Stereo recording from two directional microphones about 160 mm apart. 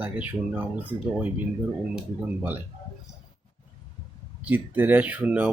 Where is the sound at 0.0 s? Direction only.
10° right (ahead or behind).